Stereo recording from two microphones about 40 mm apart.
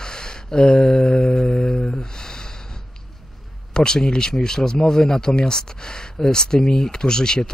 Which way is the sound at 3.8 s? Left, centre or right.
Centre.